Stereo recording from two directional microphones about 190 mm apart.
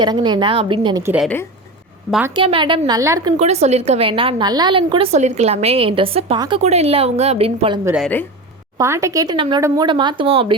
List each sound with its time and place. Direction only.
0.0 s speech: 25° right (ahead or behind)
1.0 s a woman's voice: 5° right (ahead or behind)
2.3 s speech: 25° right (ahead or behind)
3.3 s a woman's voice: 35° right (ahead or behind)
7.9 s speech: centre (ahead or behind)
8.8 s speech: 15° right (ahead or behind)